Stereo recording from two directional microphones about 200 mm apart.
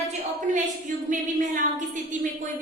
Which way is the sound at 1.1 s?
40° right (ahead or behind).